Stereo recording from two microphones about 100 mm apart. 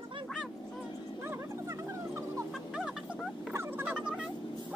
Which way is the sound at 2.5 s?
5° right (ahead or behind).